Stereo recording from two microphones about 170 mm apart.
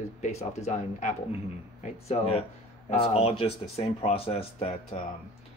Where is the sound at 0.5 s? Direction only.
45° left (ahead or behind).